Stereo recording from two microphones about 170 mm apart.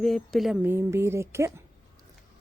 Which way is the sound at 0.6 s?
15° right (ahead or behind).